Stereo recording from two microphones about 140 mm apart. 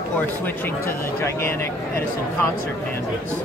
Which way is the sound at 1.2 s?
15° left (ahead or behind).